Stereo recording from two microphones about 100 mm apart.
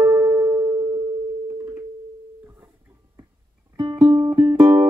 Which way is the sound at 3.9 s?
25° right (ahead or behind).